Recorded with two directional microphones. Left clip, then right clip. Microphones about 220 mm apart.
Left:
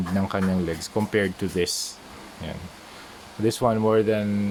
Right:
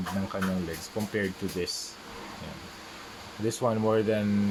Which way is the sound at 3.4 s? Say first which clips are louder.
Left 5 dB; 25° left (ahead or behind).